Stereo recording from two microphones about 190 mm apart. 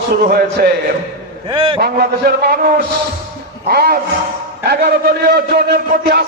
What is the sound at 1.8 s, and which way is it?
A man's voice, 55° right (ahead or behind).